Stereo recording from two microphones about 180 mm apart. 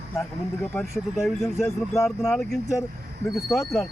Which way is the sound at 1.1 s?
Centre (ahead or behind).